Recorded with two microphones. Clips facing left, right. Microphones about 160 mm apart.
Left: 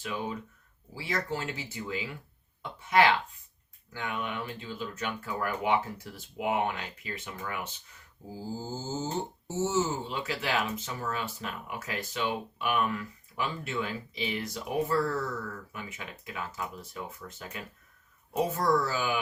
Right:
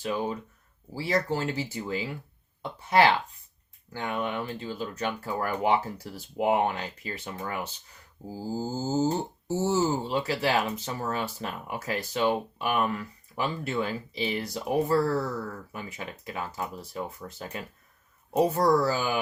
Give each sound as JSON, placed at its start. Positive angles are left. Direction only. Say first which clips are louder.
{"t": 0.0, "sound": "speech", "louder": "right 5 dB", "side_deg": -40}